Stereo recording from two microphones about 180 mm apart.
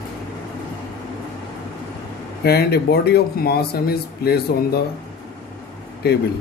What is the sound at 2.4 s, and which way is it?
Speech, 60° left (ahead or behind).